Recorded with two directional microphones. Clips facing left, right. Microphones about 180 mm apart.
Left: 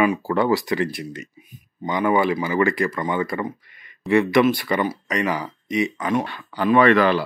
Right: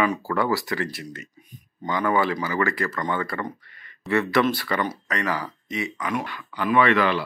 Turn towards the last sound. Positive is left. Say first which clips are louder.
# left 4 dB
turn(degrees=40)  # may be behind; listen again after turning